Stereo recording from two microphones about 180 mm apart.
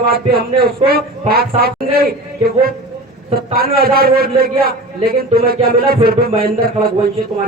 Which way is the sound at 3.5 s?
55° right (ahead or behind).